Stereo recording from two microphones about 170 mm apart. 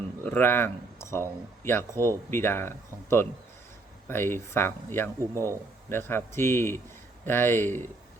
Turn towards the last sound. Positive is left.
turn(degrees=15)  # may be behind; listen again after turning